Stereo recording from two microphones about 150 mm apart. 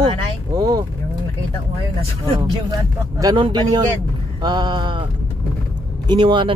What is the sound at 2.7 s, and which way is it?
A man's voice, 25° right (ahead or behind).